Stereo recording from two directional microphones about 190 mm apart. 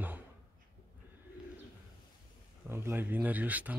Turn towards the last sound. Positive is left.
turn(degrees=-10)  # may be behind; listen again after turning